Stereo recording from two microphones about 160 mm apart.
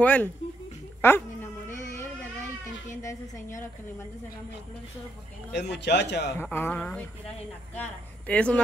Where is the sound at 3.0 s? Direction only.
20° left (ahead or behind).